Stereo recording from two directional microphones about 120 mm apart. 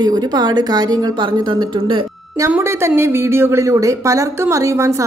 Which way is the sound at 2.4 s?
20° right (ahead or behind).